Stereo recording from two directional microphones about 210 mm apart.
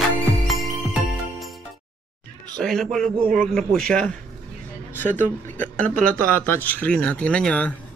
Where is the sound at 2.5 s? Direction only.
Centre (ahead or behind).